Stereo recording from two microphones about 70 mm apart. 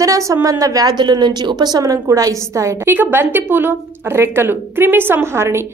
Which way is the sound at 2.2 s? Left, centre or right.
Right.